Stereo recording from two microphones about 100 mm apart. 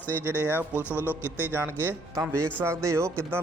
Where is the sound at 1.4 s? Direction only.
20° right (ahead or behind).